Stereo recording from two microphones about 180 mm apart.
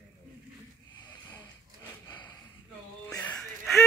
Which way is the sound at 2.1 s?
20° left (ahead or behind).